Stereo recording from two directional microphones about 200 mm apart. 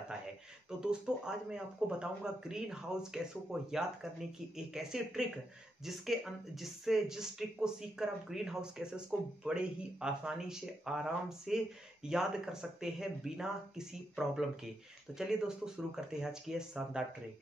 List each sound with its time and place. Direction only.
0.7 s speech: 5° right (ahead or behind)
4.7 s speech: centre (ahead or behind)